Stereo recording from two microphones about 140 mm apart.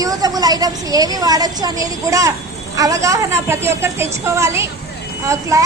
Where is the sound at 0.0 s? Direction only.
25° right (ahead or behind).